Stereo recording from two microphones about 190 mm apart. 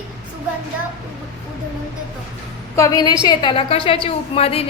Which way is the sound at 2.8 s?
20° left (ahead or behind).